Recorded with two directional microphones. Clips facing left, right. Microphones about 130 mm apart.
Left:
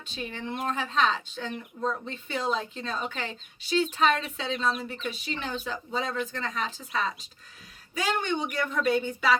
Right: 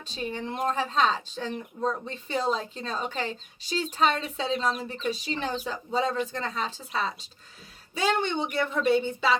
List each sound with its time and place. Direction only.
0.0 s speech: 35° right (ahead or behind)